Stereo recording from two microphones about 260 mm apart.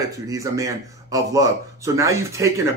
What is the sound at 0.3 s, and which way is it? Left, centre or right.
Speech, centre.